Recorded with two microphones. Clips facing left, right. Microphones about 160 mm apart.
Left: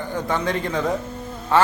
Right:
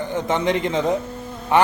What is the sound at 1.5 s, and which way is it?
Insect, 15° right (ahead or behind).